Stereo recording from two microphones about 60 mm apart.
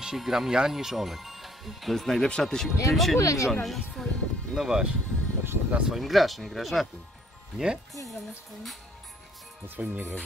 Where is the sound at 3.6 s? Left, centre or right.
Centre.